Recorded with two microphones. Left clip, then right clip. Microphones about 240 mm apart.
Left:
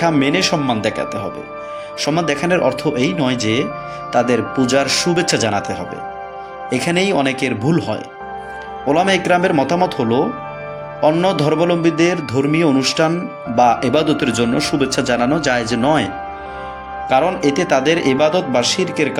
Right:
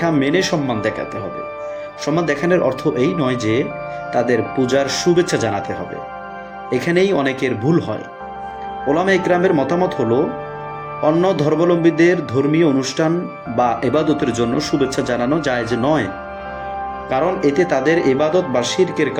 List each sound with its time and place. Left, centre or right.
0.0 s speech: left
17.1 s speech: left